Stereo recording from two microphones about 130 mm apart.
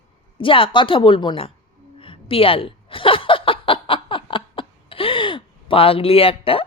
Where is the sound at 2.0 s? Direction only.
45° left (ahead or behind).